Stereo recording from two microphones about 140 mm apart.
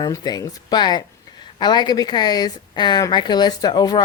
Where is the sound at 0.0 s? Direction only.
30° left (ahead or behind).